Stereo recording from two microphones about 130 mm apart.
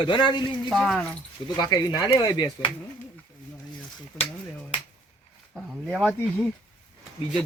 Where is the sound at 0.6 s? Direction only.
Centre (ahead or behind).